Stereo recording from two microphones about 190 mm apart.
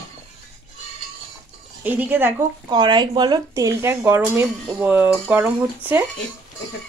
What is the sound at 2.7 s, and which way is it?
Speech, 25° right (ahead or behind).